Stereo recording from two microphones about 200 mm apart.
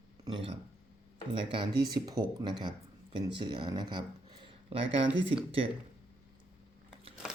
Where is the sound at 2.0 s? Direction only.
20° right (ahead or behind).